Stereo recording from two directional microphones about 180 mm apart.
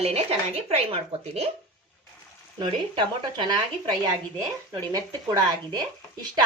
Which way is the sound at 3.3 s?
25° right (ahead or behind).